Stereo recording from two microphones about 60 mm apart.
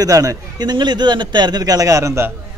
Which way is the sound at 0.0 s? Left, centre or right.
Right.